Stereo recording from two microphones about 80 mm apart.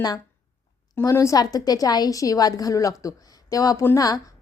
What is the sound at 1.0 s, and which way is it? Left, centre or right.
Speech, left.